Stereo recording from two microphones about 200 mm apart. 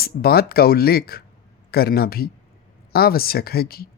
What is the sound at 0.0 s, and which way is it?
Speech, 50° left (ahead or behind).